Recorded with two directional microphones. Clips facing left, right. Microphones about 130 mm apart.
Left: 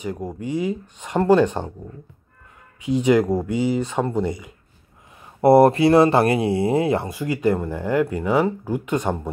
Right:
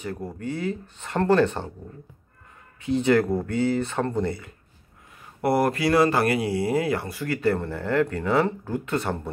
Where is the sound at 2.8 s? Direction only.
15° left (ahead or behind).